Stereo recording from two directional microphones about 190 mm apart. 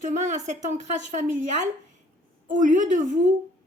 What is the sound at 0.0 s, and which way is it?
A woman's voice, 40° right (ahead or behind).